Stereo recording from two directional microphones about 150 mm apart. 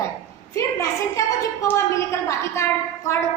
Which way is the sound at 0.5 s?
20° left (ahead or behind).